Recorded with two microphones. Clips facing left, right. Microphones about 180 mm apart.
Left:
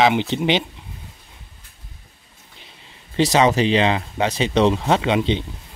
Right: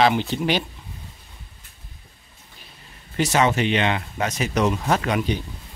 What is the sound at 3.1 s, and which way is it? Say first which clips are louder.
Speech: left 4 dB; 30° left (ahead or behind).